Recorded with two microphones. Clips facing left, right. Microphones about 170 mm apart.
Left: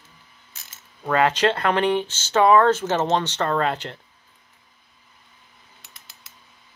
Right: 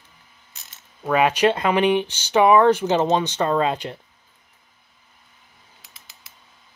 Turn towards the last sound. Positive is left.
turn(degrees=0)  # may be behind; listen again after turning